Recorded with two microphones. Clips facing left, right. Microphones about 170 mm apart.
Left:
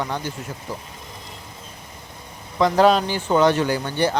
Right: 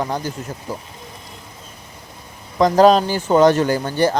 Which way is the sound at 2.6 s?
40° right (ahead or behind).